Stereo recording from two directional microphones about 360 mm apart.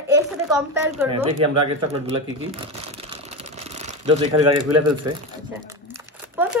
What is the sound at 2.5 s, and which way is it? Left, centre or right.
Crumpling, centre.